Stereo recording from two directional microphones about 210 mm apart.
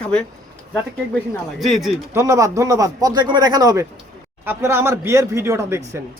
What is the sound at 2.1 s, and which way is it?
A man's voice, 15° right (ahead or behind).